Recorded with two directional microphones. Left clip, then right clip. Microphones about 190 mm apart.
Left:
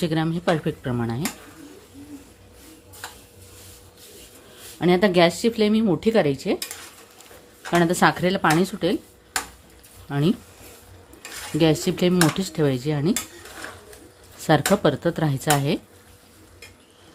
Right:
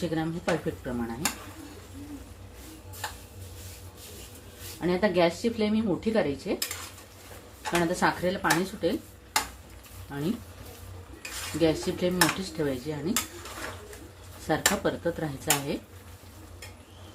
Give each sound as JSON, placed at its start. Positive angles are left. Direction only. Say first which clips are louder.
{"t": 0.0, "sound": "speech", "louder": "left 6 dB", "side_deg": 55}
{"t": 4.8, "sound": "speech", "louder": "left 7 dB", "side_deg": 70}
{"t": 7.7, "sound": "speech", "louder": "left 7 dB", "side_deg": 70}
{"t": 10.1, "sound": "speech", "louder": "left 9 dB", "side_deg": 70}
{"t": 11.6, "sound": "speech", "louder": "left 6 dB", "side_deg": 70}
{"t": 14.4, "sound": "speech", "louder": "left 8 dB", "side_deg": 70}